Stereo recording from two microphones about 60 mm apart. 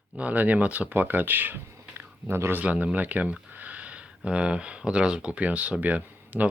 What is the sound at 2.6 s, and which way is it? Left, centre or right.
Speech, right.